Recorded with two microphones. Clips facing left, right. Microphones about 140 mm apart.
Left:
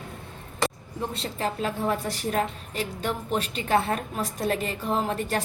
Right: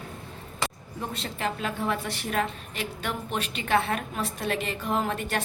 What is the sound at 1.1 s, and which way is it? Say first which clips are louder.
A woman's voice: left 1 dB; 35° left (ahead or behind).